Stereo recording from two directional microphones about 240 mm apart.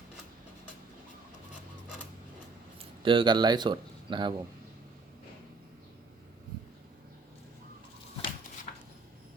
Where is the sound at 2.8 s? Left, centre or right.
Right.